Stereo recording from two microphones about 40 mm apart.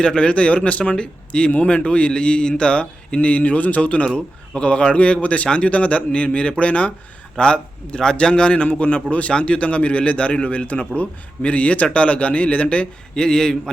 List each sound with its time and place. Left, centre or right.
0.0 s a man's voice: left